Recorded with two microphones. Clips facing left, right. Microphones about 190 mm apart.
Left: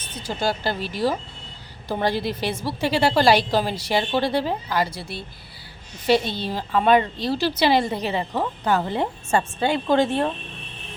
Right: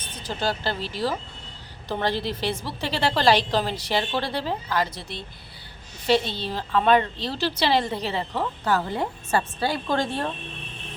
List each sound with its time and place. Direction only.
0.2 s speech: 10° left (ahead or behind)